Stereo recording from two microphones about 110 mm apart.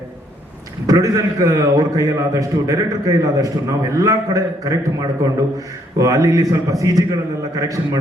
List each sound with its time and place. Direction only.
0.9 s a man's voice: 35° right (ahead or behind)